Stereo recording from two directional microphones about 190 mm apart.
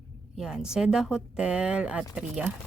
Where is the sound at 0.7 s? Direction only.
5° right (ahead or behind).